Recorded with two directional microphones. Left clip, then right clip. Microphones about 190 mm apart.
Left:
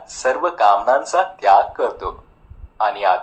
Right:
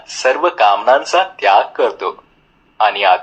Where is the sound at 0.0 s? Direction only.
30° right (ahead or behind).